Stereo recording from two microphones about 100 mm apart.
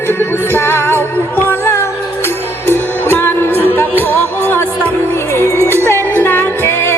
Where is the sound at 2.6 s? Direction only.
25° left (ahead or behind).